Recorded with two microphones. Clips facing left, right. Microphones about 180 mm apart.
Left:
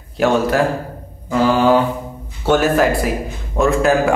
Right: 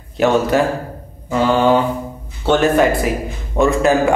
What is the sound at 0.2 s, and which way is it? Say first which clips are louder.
A man's voice: right 1 dB; centre (ahead or behind).